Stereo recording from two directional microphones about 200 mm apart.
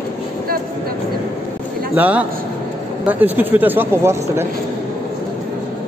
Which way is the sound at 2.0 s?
5° right (ahead or behind).